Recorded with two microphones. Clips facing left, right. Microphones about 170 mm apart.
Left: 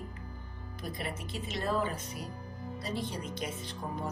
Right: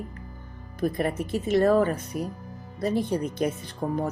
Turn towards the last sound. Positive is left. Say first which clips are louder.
# right 11 dB
turn(degrees=-65)  # may be behind; listen again after turning